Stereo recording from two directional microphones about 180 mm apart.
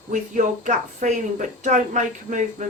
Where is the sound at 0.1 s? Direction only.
45° right (ahead or behind).